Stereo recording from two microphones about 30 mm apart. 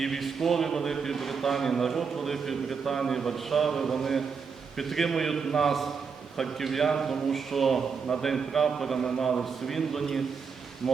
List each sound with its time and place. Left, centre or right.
0.2 s a man's voice: centre
9.0 s a man's voice: left
9.2 s a man's voice: centre